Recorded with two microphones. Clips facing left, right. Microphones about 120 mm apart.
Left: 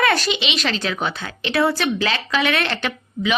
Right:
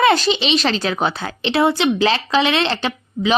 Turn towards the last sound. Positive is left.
turn(degrees=-30)  # may be behind; listen again after turning